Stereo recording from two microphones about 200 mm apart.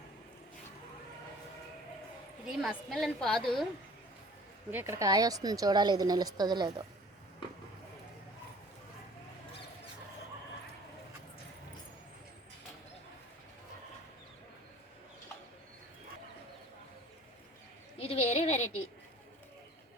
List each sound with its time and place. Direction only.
2.6 s a woman's voice: centre (ahead or behind)
4.7 s a woman's voice: 10° right (ahead or behind)
17.9 s a sound: 30° left (ahead or behind)